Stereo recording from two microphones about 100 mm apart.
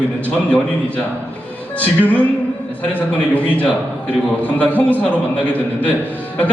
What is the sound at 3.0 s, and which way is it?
A man's voice, 15° left (ahead or behind).